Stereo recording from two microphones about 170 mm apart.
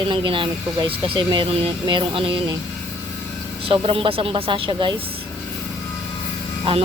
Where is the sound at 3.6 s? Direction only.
35° right (ahead or behind).